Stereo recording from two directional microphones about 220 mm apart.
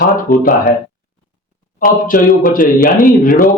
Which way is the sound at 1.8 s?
40° left (ahead or behind).